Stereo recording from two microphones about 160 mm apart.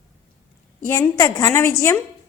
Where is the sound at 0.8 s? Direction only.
15° left (ahead or behind).